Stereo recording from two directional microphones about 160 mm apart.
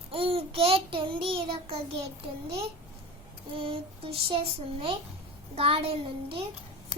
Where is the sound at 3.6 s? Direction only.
35° right (ahead or behind).